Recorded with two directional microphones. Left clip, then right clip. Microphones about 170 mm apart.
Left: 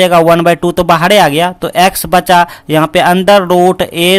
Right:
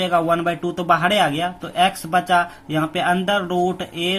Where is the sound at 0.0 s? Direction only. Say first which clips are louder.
Left 12 dB; 60° left (ahead or behind).